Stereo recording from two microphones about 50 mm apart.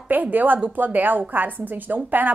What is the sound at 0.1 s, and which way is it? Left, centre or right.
A woman's voice, right.